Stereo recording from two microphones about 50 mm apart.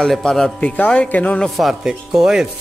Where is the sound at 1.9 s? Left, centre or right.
Centre.